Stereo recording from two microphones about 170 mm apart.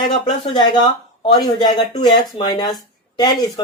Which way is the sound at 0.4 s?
30° left (ahead or behind).